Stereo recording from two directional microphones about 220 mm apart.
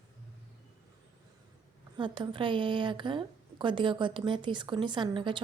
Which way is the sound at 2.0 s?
20° right (ahead or behind).